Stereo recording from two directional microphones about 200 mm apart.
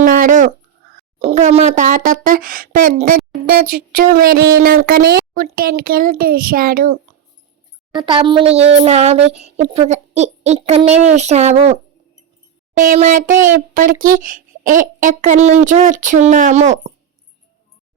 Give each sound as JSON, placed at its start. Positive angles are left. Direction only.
{"t": 0.0, "sound": "a sound", "side_deg": -45}
{"t": 3.4, "sound": "speech", "side_deg": -45}
{"t": 7.9, "sound": "speech", "side_deg": -25}